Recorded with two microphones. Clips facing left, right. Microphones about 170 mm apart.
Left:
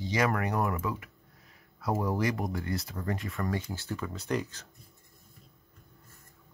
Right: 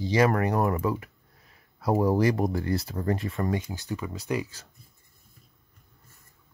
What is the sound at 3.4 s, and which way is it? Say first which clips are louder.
Speech: right 4 dB; 20° right (ahead or behind).